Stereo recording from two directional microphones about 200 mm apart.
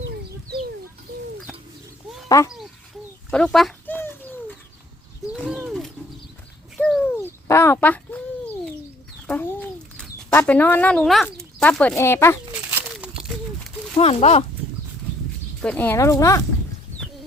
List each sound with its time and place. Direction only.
3.2 s bird: 5° left (ahead or behind)
5.3 s a sound: centre (ahead or behind)
6.7 s bird: 5° left (ahead or behind)
7.4 s speech: 15° left (ahead or behind)
9.2 s chicken: 10° left (ahead or behind)
10.0 s speech: 5° left (ahead or behind)
13.9 s speech: 30° left (ahead or behind)
15.6 s speech: 10° left (ahead or behind)